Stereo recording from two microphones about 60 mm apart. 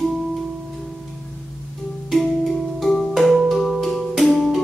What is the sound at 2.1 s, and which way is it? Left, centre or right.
Music, centre.